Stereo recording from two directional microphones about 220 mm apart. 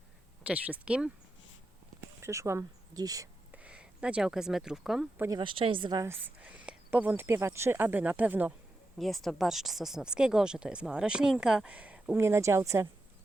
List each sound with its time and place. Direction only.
0.4 s speech: 5° right (ahead or behind)
2.2 s speech: 10° right (ahead or behind)
5.4 s speech: 25° right (ahead or behind)